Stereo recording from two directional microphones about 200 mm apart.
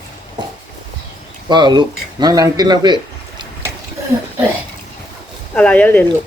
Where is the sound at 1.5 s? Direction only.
20° right (ahead or behind).